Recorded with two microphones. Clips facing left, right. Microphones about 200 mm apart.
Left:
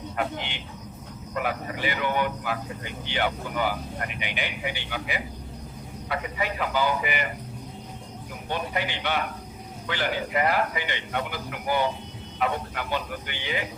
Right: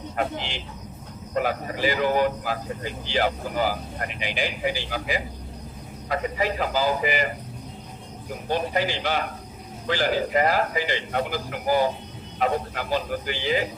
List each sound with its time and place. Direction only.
0.2 s speech: 30° right (ahead or behind)
8.4 s speech: 35° right (ahead or behind)